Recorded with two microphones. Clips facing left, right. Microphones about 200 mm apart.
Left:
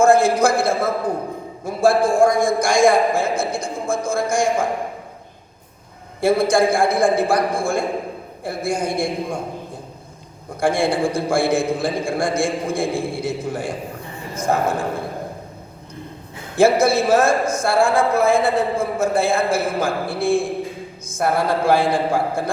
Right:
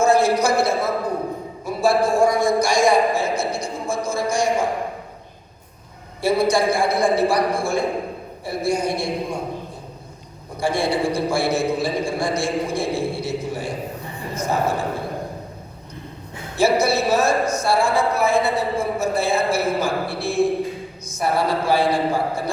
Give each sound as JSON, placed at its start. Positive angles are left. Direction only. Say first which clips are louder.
{"t": 0.0, "sound": "a sound", "louder": "left 3 dB", "side_deg": 50}
{"t": 1.6, "sound": "a man's voice", "louder": "left 2 dB", "side_deg": 50}
{"t": 6.2, "sound": "a man's voice", "louder": "left 2 dB", "side_deg": 50}
{"t": 10.6, "sound": "a man's voice", "louder": "left 2 dB", "side_deg": 50}
{"t": 16.6, "sound": "a man's voice", "louder": "left 3 dB", "side_deg": 50}